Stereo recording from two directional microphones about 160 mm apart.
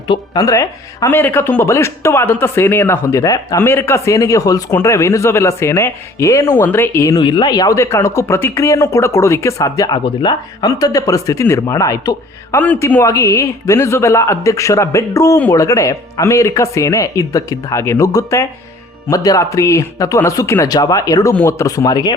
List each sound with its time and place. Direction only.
0.1 s speech: 20° left (ahead or behind)